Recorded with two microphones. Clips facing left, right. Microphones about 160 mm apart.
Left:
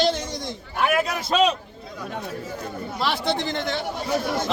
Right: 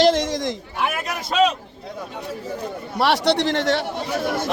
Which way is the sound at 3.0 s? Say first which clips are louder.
Right 6 dB; 75° right (ahead or behind).